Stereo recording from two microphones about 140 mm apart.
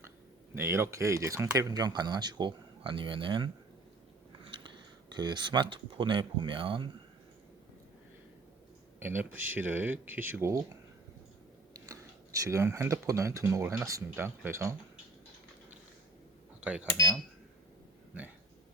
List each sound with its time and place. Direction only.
0.5 s speech: 15° right (ahead or behind); by 3.5 s 35° right (ahead or behind)
4.4 s a sound: 35° right (ahead or behind)
5.1 s speech: 30° right (ahead or behind)
9.0 s speech: 15° right (ahead or behind)
11.7 s speech: 25° right (ahead or behind)